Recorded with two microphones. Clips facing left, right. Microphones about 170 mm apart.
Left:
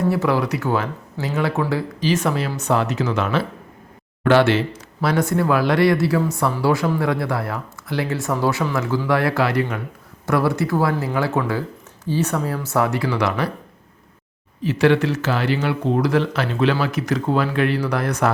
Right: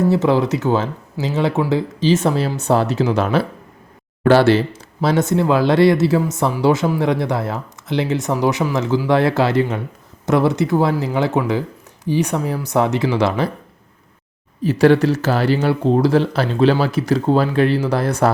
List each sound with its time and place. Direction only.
0.1 s speech: 25° right (ahead or behind)
5.0 s speech: 25° right (ahead or behind)
14.6 s speech: 40° right (ahead or behind)